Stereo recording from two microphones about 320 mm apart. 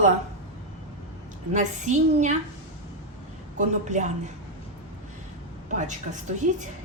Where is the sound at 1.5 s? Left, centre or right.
Right.